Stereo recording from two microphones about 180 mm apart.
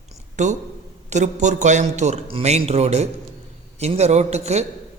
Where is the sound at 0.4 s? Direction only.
40° right (ahead or behind).